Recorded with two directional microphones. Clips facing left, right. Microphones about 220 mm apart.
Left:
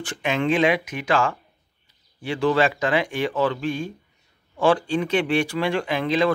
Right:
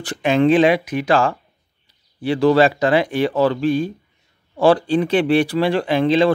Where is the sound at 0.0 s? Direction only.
35° right (ahead or behind).